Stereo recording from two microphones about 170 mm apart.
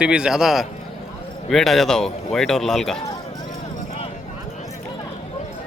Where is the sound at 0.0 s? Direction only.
5° right (ahead or behind).